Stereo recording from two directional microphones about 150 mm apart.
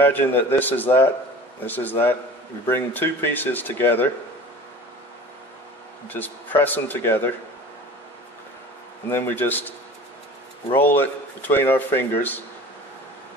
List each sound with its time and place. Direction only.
0.0 s speech: 10° left (ahead or behind)
6.0 s speech: 10° left (ahead or behind)
9.1 s speech: 15° left (ahead or behind)